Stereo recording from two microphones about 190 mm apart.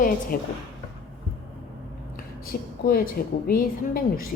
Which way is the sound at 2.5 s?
50° left (ahead or behind).